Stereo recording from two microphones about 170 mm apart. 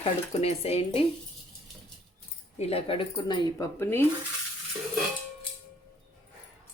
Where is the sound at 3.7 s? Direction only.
15° left (ahead or behind).